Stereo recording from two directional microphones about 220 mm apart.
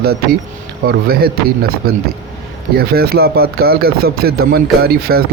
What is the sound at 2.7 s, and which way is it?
Speech, 45° right (ahead or behind).